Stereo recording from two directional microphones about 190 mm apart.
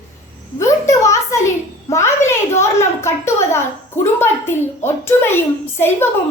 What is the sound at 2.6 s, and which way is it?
A woman's voice, 15° left (ahead or behind).